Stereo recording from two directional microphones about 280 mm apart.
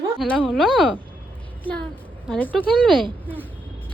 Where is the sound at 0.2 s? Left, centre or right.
Centre.